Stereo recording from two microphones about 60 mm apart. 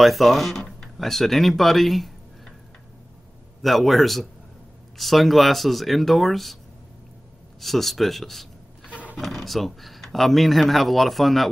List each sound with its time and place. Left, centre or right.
0.0 s speech: centre
3.6 s speech: centre
7.6 s speech: centre
8.8 s a sound: right
9.1 s speech: centre